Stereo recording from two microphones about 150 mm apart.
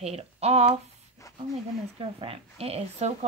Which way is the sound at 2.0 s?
40° right (ahead or behind).